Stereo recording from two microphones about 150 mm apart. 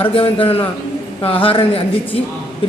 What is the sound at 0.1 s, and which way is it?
A man's voice, 35° left (ahead or behind).